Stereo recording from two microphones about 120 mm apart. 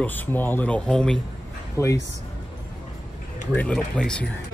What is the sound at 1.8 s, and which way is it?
Speech, 25° left (ahead or behind).